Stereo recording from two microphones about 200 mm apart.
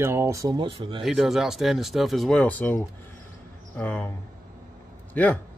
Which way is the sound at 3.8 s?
5° left (ahead or behind).